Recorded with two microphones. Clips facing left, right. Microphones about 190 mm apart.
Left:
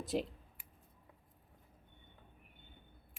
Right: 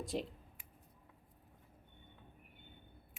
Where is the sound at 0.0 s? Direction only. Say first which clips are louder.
Left 3 dB; centre (ahead or behind).